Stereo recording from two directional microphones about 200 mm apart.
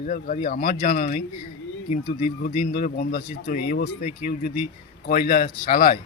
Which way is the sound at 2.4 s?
50° left (ahead or behind).